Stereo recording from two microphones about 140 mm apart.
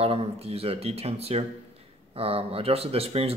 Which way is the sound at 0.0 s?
45° right (ahead or behind).